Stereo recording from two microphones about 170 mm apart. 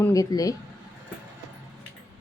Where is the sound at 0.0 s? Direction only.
20° left (ahead or behind).